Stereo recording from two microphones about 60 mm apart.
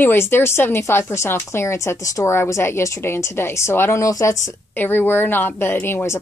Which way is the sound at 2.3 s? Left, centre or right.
Left.